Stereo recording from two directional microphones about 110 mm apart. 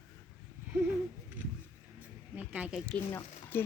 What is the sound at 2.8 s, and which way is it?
Speech, 15° left (ahead or behind).